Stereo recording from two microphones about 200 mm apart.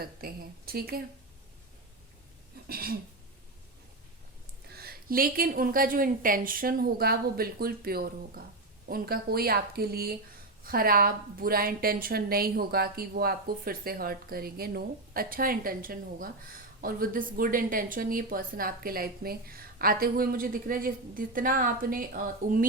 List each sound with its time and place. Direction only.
0.0 s a woman's voice: 50° right (ahead or behind)
2.6 s a woman's voice: 50° right (ahead or behind)
4.7 s a woman's voice: 50° right (ahead or behind)